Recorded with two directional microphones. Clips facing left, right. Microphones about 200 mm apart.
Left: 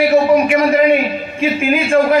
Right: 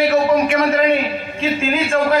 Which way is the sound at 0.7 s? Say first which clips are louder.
Left 4 dB; 15° left (ahead or behind).